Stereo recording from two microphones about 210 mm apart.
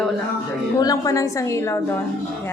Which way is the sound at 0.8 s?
15° left (ahead or behind).